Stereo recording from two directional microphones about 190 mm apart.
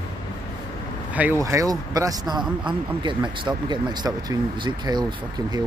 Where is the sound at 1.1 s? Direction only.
10° right (ahead or behind).